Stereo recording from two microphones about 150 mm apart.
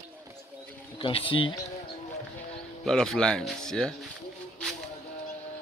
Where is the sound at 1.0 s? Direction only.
35° left (ahead or behind).